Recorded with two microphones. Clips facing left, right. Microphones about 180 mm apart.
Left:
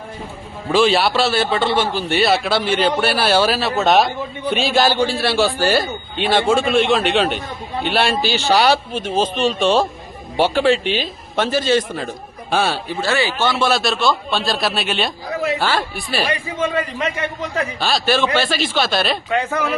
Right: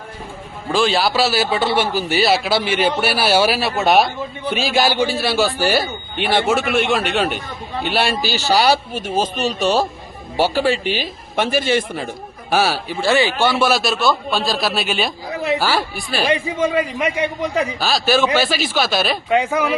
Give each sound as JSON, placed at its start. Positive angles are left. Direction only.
{"t": 0.7, "sound": "a man's voice", "side_deg": 0}
{"t": 8.9, "sound": "speech", "side_deg": -45}
{"t": 9.6, "sound": "a man's voice", "side_deg": -5}
{"t": 16.6, "sound": "a man's voice", "side_deg": -10}
{"t": 17.7, "sound": "a man's voice", "side_deg": -5}
{"t": 19.3, "sound": "a man's voice", "side_deg": -15}